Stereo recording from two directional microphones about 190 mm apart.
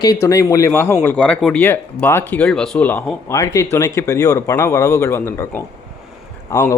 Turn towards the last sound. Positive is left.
turn(degrees=15)  # may be behind; listen again after turning